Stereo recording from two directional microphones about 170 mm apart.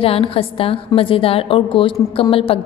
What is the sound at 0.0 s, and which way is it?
A woman's voice, 35° left (ahead or behind).